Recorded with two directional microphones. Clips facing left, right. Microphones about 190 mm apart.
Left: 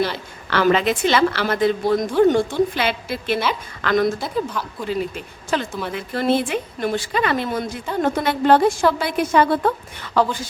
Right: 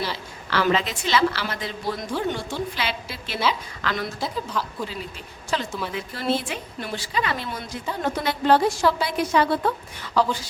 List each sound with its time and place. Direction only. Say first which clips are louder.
0.0 s a woman's voice: left 7 dB; 55° left (ahead or behind)
4.2 s a woman's voice: left 4 dB; centre (ahead or behind)
4.9 s a woman's voice: left 11 dB; 55° left (ahead or behind)